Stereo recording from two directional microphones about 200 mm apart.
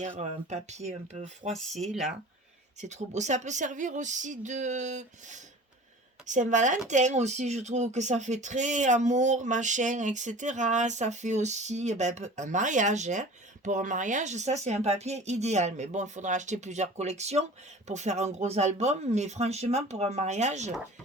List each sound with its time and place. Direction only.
0.2 s speech: 35° right (ahead or behind)
1.8 s speech: centre (ahead or behind)
2.8 s speech: 35° right (ahead or behind)